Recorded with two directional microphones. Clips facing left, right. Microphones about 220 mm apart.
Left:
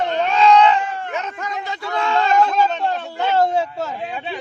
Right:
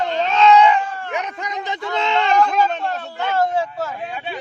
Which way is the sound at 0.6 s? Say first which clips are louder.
Even; 15° right (ahead or behind).